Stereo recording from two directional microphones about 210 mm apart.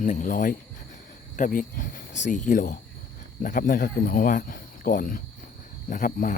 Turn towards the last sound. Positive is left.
turn(degrees=40)  # may be behind; listen again after turning